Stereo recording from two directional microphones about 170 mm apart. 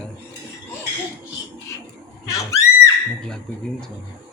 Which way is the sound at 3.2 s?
5° left (ahead or behind).